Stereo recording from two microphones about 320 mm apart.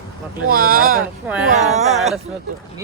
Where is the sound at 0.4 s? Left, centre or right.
Right.